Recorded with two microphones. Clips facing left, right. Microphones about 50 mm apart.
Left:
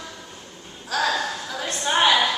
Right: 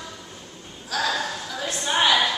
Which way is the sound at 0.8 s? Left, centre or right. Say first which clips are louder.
Left 2 dB; centre.